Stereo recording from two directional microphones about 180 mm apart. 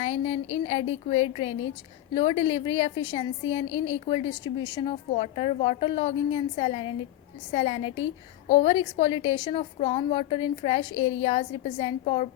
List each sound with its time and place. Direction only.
0.0 s a woman's voice: 35° left (ahead or behind)